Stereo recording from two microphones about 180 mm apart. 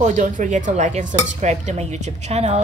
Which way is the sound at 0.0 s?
45° right (ahead or behind).